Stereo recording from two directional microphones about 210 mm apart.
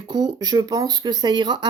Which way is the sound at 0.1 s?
20° right (ahead or behind).